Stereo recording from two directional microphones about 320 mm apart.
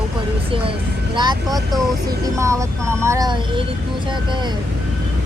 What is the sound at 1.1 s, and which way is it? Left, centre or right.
Speech, centre.